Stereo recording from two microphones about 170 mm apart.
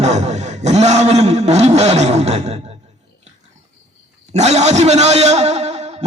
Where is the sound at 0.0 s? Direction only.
40° right (ahead or behind).